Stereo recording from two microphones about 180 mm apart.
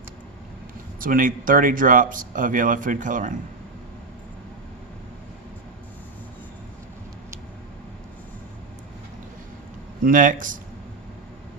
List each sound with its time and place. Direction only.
0.9 s speech: 50° right (ahead or behind)
10.0 s speech: 50° right (ahead or behind)